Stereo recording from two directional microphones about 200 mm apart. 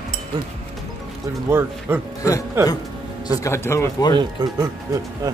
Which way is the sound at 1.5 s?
10° right (ahead or behind).